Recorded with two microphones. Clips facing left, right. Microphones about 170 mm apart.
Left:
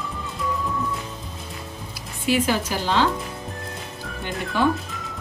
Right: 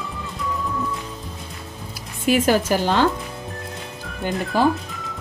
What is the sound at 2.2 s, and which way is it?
Speech, 45° right (ahead or behind).